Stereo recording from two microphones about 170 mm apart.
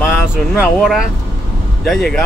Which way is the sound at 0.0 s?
5° right (ahead or behind).